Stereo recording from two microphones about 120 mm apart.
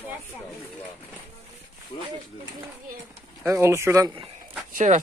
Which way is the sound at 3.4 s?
25° right (ahead or behind).